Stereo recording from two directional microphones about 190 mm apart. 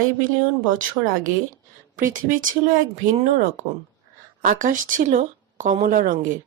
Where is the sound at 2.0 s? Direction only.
45° right (ahead or behind).